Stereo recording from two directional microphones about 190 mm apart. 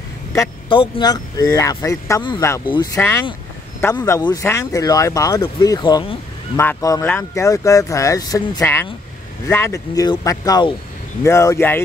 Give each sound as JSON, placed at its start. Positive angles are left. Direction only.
{"t": 0.3, "sound": "speech", "side_deg": 20}